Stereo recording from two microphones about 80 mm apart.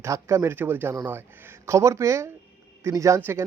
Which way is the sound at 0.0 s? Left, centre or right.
Right.